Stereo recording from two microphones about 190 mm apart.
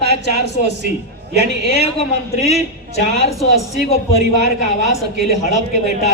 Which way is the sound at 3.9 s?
35° left (ahead or behind).